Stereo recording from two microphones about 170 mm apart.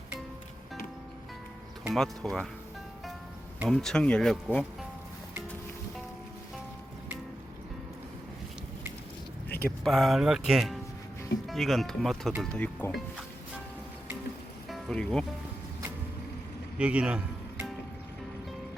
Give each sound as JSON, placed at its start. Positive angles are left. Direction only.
{"t": 1.8, "sound": "speech", "side_deg": 0}
{"t": 3.7, "sound": "speech", "side_deg": 5}
{"t": 9.5, "sound": "a sound", "side_deg": 65}
{"t": 9.8, "sound": "speech", "side_deg": 0}
{"t": 14.7, "sound": "music", "side_deg": 5}
{"t": 16.7, "sound": "music", "side_deg": -5}